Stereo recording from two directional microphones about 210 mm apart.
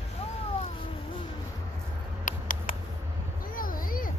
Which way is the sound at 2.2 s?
40° left (ahead or behind).